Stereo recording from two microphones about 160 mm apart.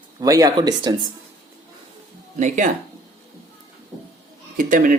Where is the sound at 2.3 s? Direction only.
50° right (ahead or behind).